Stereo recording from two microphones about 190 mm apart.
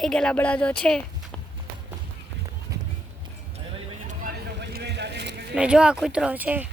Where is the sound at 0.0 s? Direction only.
5° left (ahead or behind).